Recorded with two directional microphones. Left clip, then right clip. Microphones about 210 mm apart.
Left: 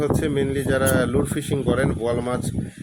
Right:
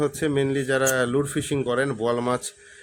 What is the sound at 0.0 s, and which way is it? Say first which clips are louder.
Speech: left 1 dB; 5° right (ahead or behind).